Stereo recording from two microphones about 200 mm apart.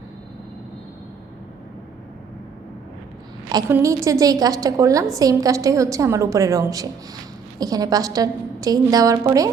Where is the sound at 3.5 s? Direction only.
15° right (ahead or behind).